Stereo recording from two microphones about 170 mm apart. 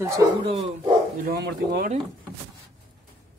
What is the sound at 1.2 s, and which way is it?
Speech, 65° right (ahead or behind).